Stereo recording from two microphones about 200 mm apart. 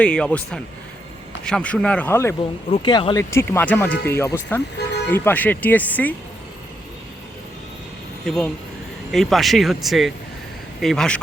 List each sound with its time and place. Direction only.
0.0 s speech: 5° left (ahead or behind)
2.6 s speech: 25° left (ahead or behind); by 6.1 s 10° left (ahead or behind)
8.2 s speech: 5° left (ahead or behind)